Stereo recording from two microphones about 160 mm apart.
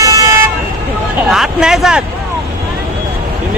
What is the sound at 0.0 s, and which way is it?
Vehicle, 20° right (ahead or behind).